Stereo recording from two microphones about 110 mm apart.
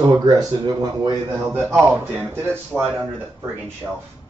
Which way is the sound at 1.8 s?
20° right (ahead or behind).